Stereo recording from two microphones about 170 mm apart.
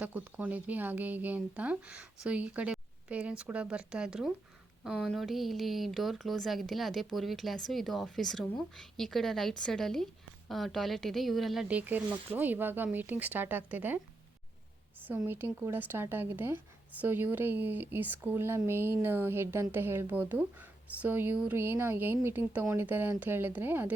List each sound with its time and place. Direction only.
0.0 s speech: 10° right (ahead or behind)
15.0 s speech: 10° right (ahead or behind)